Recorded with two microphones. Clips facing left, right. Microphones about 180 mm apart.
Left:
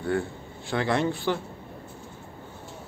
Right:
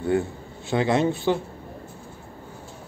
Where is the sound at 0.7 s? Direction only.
20° right (ahead or behind).